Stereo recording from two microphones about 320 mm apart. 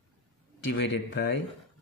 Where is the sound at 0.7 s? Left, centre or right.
Left.